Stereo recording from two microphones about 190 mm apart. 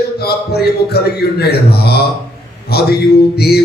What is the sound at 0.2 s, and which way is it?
Music, 55° left (ahead or behind).